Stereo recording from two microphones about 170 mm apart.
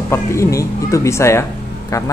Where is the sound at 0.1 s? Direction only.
15° left (ahead or behind).